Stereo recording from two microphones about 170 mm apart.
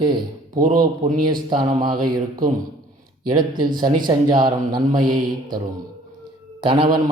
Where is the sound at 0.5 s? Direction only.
55° right (ahead or behind).